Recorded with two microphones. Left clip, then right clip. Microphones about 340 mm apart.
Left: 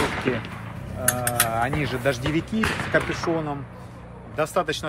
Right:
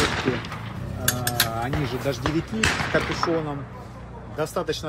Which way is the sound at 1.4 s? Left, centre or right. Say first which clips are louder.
Left 2 dB; left.